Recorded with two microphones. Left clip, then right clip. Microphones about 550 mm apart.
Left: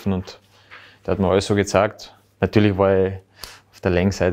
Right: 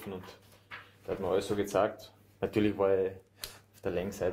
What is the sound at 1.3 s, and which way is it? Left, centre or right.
Speech, left.